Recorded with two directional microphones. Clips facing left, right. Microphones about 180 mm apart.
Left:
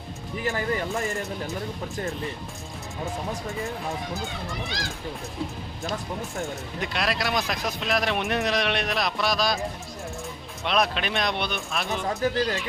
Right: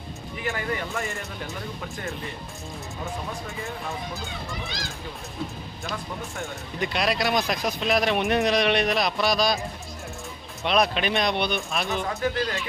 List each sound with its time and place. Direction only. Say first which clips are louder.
0.4 s speech: left 2 dB; 35° left (ahead or behind)
6.7 s speech: right 3 dB; centre (ahead or behind)
12.2 s speech: left 4 dB; 35° left (ahead or behind)